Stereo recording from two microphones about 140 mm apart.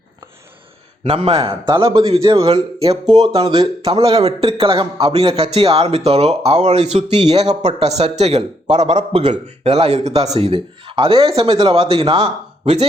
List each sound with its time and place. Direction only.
1.0 s a man's voice: 40° right (ahead or behind)
2.3 s speech: 40° right (ahead or behind)
3.1 s speech: 30° right (ahead or behind)
3.6 s a man's voice: 40° right (ahead or behind)